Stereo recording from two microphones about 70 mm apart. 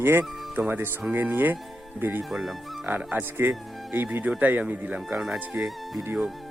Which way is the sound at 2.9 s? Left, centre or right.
Right.